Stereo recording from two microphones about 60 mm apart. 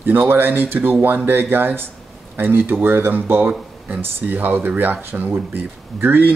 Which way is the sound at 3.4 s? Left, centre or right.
Centre.